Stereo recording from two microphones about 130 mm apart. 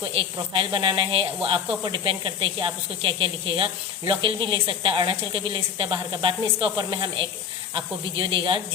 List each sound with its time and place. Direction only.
0.2 s speech: 40° right (ahead or behind)